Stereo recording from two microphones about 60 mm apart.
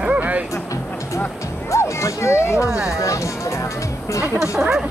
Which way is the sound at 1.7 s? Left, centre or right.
Left.